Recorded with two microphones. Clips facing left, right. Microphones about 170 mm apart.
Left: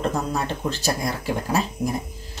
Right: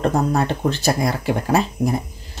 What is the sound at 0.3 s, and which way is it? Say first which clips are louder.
Speech: right 6 dB; 60° right (ahead or behind).